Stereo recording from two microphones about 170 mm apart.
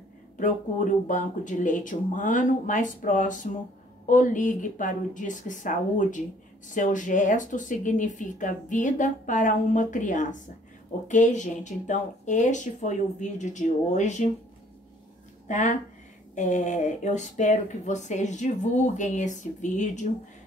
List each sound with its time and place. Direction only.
0.4 s speech: 50° left (ahead or behind)
15.4 s speech: 45° left (ahead or behind)